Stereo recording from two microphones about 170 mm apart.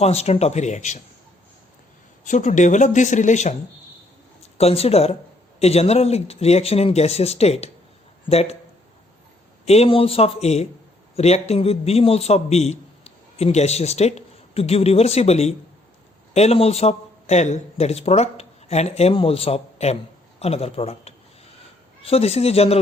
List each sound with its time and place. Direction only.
0.0 s a man's voice: 40° left (ahead or behind)
2.2 s speech: 45° left (ahead or behind)
4.5 s a man's voice: 35° left (ahead or behind)
9.6 s a man's voice: 35° left (ahead or behind)